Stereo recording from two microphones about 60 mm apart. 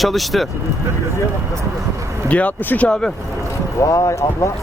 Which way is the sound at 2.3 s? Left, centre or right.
Left.